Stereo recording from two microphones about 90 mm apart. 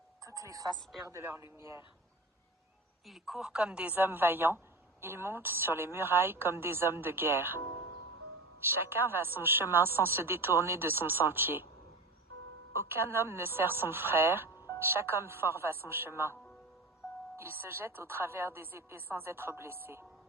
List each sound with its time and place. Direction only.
0.3 s speech: 40° right (ahead or behind)
1.5 s speech: 35° right (ahead or behind)
3.1 s a woman's voice: 5° right (ahead or behind); by 7.6 s 25° right (ahead or behind)
8.6 s a woman's voice: 25° right (ahead or behind)
12.7 s a woman's voice: 30° right (ahead or behind)